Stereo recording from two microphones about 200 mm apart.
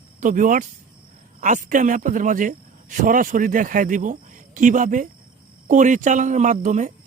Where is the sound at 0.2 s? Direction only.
40° right (ahead or behind).